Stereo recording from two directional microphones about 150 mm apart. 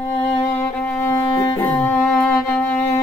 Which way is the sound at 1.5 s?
25° left (ahead or behind).